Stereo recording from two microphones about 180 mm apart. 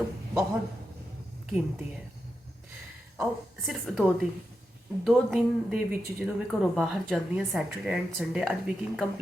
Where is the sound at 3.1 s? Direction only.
Centre (ahead or behind).